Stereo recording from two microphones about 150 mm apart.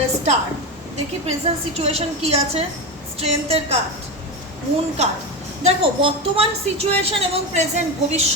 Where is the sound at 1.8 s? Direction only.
40° right (ahead or behind).